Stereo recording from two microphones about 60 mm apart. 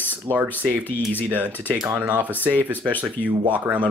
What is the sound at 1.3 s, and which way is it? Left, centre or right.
Speech, right.